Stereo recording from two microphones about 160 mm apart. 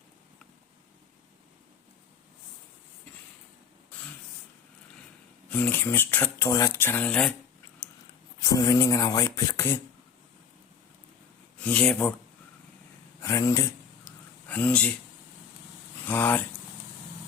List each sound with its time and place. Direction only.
5.5 s speech: 10° left (ahead or behind)
8.4 s speech: 25° left (ahead or behind)
11.6 s speech: 10° left (ahead or behind)
13.2 s a sound: 20° left (ahead or behind)
16.0 s speech: 10° left (ahead or behind)